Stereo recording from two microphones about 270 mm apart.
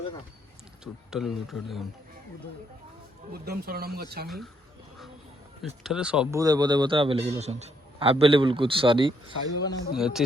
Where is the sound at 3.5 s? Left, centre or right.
Right.